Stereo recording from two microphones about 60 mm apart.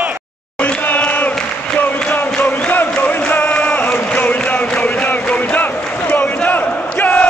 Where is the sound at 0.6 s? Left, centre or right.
Left.